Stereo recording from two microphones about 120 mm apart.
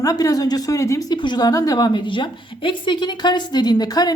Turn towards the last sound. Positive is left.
turn(degrees=35)  # may be behind; listen again after turning